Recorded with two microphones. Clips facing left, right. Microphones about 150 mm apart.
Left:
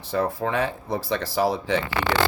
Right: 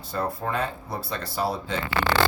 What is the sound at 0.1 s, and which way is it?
Speech, 85° left.